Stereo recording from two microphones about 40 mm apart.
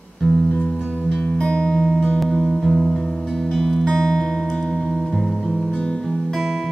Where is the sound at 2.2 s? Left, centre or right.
Centre.